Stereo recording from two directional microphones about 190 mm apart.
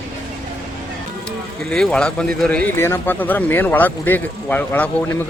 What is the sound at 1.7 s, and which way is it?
A man's voice, 5° left (ahead or behind).